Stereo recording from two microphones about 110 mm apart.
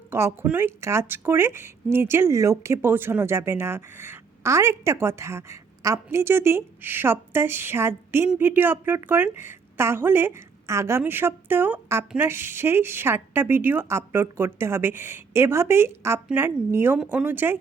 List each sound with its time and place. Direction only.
0.1 s speech: 25° right (ahead or behind)